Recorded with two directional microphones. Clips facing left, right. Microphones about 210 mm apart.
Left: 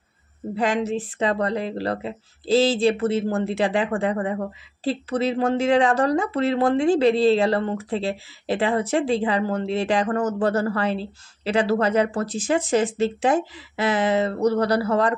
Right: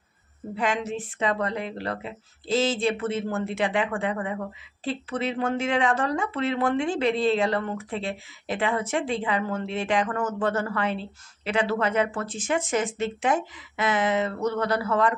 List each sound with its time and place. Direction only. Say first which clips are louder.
0.6 s speech: left 5 dB; 35° left (ahead or behind)